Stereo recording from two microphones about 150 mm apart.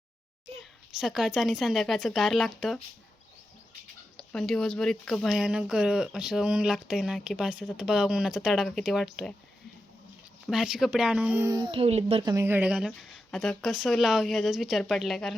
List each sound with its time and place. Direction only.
0.6 s speech: 5° right (ahead or behind)
4.2 s speech: 5° left (ahead or behind)
10.4 s speech: 5° right (ahead or behind)
11.5 s speech: 35° right (ahead or behind)
12.2 s speech: 20° right (ahead or behind); by 15.4 s centre (ahead or behind)